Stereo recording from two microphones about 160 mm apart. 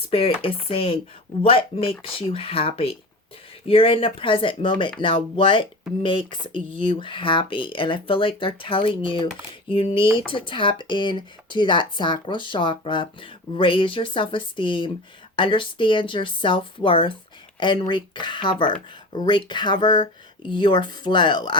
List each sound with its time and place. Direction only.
0.1 s speech: 35° left (ahead or behind)